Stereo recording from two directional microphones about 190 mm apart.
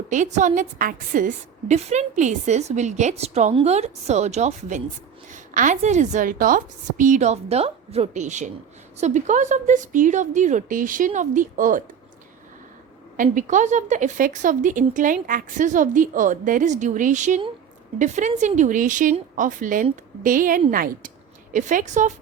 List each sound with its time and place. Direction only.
0.1 s a woman's voice: 40° right (ahead or behind)
13.2 s a woman's voice: 40° right (ahead or behind)